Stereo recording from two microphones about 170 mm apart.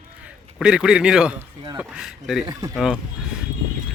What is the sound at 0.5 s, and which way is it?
A man's voice, 5° right (ahead or behind).